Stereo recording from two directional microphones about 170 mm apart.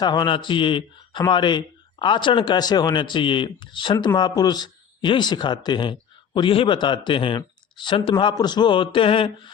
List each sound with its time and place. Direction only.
0.0 s speech: 25° left (ahead or behind)